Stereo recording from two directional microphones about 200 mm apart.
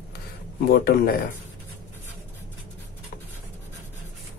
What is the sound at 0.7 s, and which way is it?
Speech, 50° left (ahead or behind).